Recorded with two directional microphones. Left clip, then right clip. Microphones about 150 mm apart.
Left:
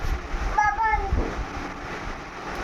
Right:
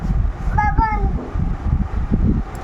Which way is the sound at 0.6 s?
15° left (ahead or behind).